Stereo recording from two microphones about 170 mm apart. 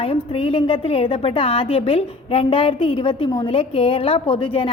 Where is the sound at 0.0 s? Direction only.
35° left (ahead or behind).